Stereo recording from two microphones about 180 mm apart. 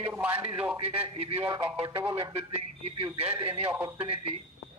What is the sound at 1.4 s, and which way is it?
Speech, 15° right (ahead or behind).